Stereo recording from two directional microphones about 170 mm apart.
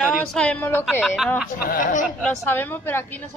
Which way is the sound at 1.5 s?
50° left (ahead or behind).